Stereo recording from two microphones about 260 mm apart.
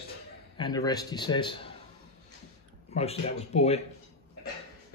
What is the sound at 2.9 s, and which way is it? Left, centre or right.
Speech, left.